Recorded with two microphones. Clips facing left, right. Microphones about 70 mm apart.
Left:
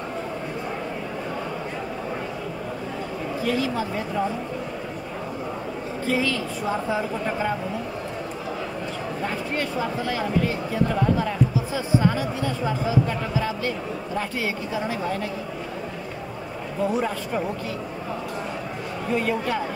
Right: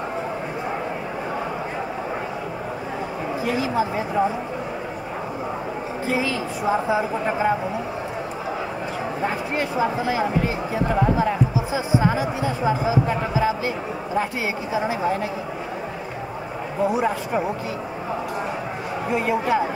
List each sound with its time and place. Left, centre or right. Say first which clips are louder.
3.4 s speech: right 2 dB; centre
6.0 s speech: even; centre
9.2 s speech: right 3 dB; centre
16.8 s speech: right 3 dB; centre
19.0 s speech: right 3 dB; centre